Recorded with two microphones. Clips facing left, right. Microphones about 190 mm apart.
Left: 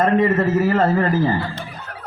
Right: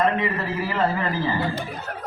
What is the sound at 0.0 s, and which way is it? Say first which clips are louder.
A man's voice: left 6 dB; 45° left (ahead or behind).